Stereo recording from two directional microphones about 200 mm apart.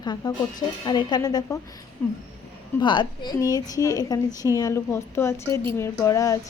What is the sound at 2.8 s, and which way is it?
A woman's voice, 25° left (ahead or behind).